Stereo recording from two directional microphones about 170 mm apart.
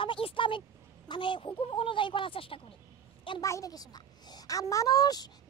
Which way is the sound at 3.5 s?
20° left (ahead or behind).